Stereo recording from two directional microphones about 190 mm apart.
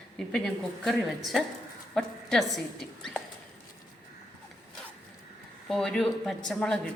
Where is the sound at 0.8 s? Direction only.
Centre (ahead or behind).